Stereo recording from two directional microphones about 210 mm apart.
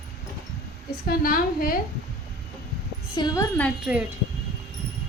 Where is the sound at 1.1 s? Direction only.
45° left (ahead or behind).